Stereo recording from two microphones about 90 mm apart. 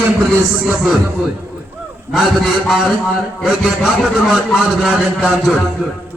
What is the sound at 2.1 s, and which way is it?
A man's voice, centre (ahead or behind).